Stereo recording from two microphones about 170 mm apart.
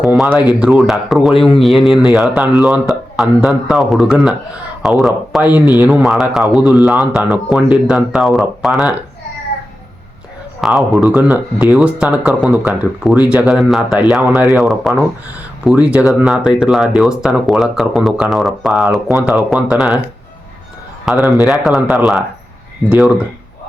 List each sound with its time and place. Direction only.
0.0 s a sound: centre (ahead or behind)
0.6 s speech: 5° right (ahead or behind)
5.5 s a man's voice: 20° left (ahead or behind)
6.0 s speech: centre (ahead or behind)
10.6 s speech: centre (ahead or behind)
21.1 s speech: centre (ahead or behind)